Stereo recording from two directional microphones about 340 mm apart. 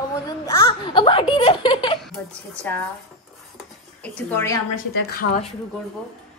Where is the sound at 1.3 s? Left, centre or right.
Centre.